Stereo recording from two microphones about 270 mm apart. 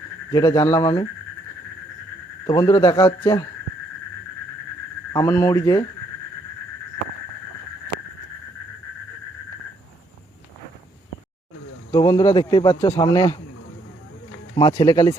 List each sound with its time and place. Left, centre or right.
0.3 s speech: centre
2.5 s speech: centre
5.1 s speech: centre
11.9 s speech: centre
14.5 s speech: centre